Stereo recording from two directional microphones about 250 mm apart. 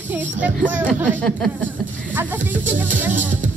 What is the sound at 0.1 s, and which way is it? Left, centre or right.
A man's voice, centre.